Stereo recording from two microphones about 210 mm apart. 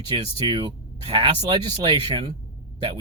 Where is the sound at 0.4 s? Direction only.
20° right (ahead or behind).